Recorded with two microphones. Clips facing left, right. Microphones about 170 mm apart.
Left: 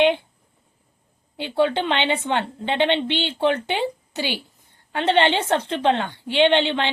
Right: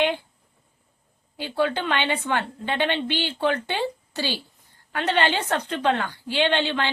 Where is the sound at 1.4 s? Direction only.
25° left (ahead or behind).